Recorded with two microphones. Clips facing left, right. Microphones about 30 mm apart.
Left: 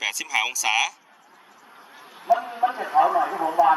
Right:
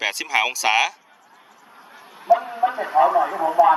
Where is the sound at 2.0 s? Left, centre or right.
Centre.